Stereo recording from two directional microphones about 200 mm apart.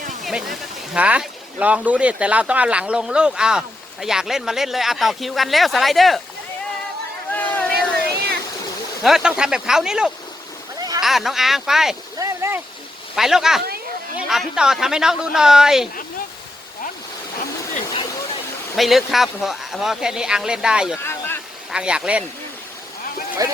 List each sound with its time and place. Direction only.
0.3 s speech: centre (ahead or behind)
7.3 s a sound: 10° left (ahead or behind)
9.0 s speech: centre (ahead or behind)
10.8 s a sound: 20° right (ahead or behind)
11.0 s speech: centre (ahead or behind)
12.2 s boat: 15° right (ahead or behind)
13.1 s speech: centre (ahead or behind)
18.8 s speech: centre (ahead or behind)
21.0 s a sound: 10° left (ahead or behind)
21.7 s speech: 5° right (ahead or behind)
23.4 s speech: 20° right (ahead or behind)